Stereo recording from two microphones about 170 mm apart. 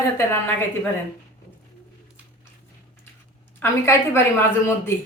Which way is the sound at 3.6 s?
15° left (ahead or behind).